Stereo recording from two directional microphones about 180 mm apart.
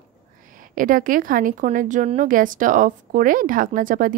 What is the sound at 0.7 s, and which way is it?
A woman's voice, 50° right (ahead or behind).